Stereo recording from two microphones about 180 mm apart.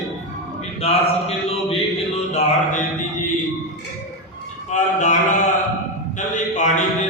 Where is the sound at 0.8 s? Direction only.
35° left (ahead or behind).